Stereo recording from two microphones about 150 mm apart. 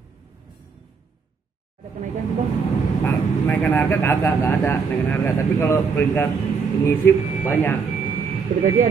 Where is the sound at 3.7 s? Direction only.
15° left (ahead or behind).